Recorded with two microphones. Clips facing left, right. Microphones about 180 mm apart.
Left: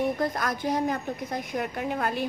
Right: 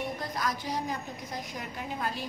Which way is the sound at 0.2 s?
55° left (ahead or behind).